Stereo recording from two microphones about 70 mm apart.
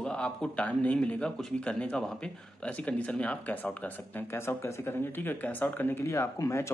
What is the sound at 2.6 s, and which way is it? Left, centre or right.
A man's voice, centre.